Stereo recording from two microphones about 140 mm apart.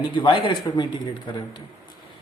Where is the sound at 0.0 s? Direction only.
35° left (ahead or behind).